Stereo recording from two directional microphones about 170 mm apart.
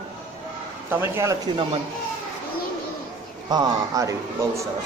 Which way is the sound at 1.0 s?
15° right (ahead or behind).